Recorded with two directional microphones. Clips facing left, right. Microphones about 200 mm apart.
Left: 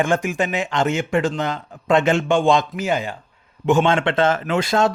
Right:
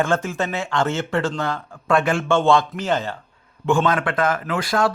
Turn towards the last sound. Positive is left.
turn(degrees=25)  # may be behind; listen again after turning